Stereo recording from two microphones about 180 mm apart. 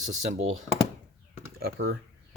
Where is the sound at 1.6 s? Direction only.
60° right (ahead or behind).